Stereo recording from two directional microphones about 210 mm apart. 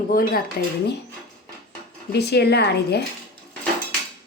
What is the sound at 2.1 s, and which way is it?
Speech, 50° left (ahead or behind).